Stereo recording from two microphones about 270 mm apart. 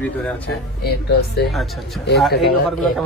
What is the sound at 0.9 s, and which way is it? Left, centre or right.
Speech, left.